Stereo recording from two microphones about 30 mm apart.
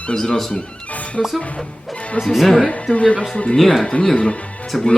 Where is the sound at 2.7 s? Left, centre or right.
Left.